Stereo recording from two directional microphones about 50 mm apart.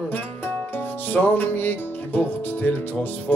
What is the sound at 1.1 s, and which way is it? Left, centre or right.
Music, left.